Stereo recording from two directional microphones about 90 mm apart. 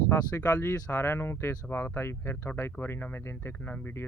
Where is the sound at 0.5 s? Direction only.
25° left (ahead or behind).